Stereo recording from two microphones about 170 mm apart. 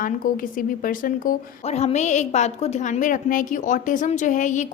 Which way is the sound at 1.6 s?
40° left (ahead or behind).